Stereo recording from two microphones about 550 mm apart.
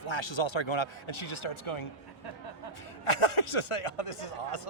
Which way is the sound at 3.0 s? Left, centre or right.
Left.